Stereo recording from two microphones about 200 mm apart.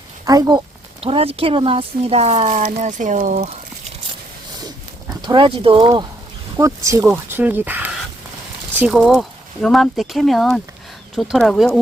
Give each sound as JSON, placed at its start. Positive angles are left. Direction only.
{"t": 0.3, "sound": "speech", "side_deg": -20}
{"t": 5.2, "sound": "speech", "side_deg": -25}